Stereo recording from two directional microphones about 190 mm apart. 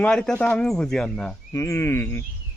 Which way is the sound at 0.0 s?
5° left (ahead or behind).